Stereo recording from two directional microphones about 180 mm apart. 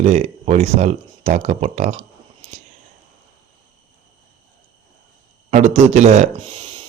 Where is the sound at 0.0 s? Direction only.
40° right (ahead or behind).